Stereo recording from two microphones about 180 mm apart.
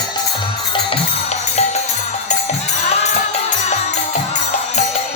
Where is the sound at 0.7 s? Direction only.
35° left (ahead or behind).